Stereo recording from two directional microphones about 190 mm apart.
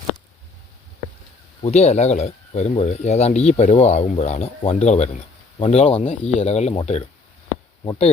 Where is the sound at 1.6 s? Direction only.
35° left (ahead or behind).